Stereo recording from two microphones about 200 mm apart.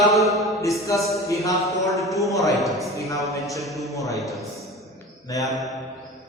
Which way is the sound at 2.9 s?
15° left (ahead or behind).